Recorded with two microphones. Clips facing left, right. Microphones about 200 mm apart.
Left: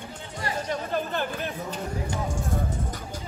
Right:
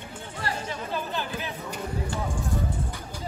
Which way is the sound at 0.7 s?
50° left (ahead or behind).